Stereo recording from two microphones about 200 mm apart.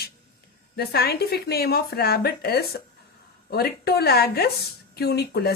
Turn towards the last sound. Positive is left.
turn(degrees=50)  # may be behind; listen again after turning